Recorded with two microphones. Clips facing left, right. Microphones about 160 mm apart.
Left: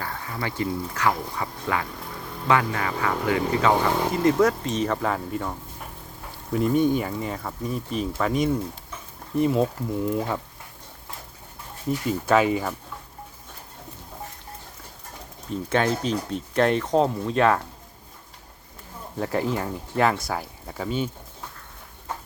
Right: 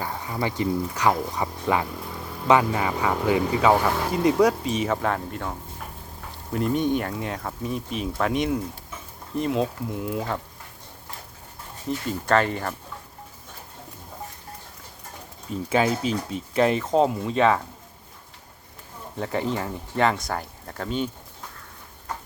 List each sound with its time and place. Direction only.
0.0 s speech: 20° right (ahead or behind)
3.8 s speech: 20° left (ahead or behind)
4.1 s speech: 15° right (ahead or behind)
11.9 s speech: 5° left (ahead or behind)
15.7 s speech: 5° right (ahead or behind)
19.2 s speech: centre (ahead or behind)